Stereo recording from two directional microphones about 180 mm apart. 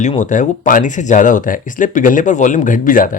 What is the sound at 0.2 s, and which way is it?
Speech, 45° left (ahead or behind).